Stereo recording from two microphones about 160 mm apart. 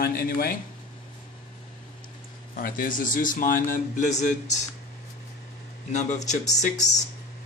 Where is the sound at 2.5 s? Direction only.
60° left (ahead or behind).